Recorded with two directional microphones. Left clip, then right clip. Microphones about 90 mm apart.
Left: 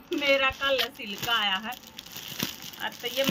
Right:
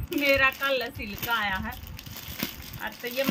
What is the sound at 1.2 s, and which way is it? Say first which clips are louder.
A woman's voice: left 1 dB; 15° left (ahead or behind).